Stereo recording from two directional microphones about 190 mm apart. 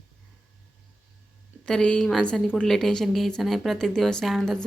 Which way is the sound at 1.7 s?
5° left (ahead or behind).